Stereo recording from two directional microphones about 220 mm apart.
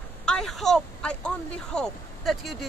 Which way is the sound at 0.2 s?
5° left (ahead or behind).